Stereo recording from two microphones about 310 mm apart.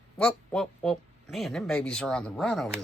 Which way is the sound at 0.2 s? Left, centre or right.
Centre.